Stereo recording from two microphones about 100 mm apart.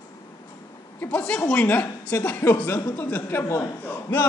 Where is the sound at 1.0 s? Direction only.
10° left (ahead or behind).